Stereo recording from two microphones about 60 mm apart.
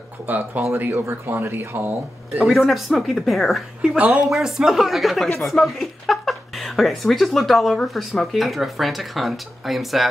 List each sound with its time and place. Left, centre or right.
0.3 s speech: right
2.4 s speech: centre
3.8 s speech: centre